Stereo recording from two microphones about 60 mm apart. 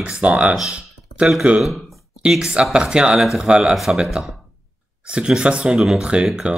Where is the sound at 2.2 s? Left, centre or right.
Centre.